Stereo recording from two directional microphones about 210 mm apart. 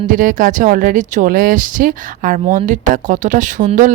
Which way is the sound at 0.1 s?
40° right (ahead or behind).